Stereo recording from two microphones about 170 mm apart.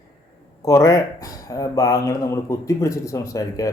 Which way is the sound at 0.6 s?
20° left (ahead or behind).